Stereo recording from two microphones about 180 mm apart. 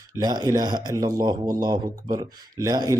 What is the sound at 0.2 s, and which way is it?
Speech, 20° right (ahead or behind).